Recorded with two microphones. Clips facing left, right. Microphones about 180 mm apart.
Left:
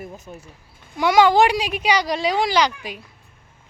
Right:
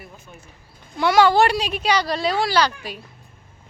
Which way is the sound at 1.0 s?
15° left (ahead or behind).